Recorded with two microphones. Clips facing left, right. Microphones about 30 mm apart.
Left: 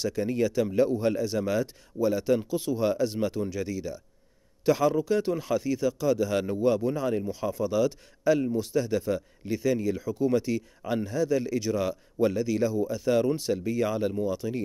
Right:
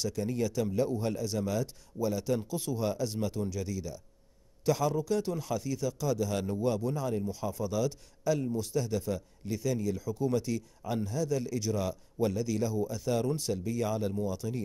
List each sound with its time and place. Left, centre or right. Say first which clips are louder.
0.0 s speech: left 5 dB; left